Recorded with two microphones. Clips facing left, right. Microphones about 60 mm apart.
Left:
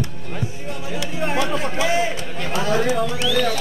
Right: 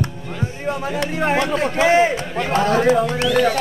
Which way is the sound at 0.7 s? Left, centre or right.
Right.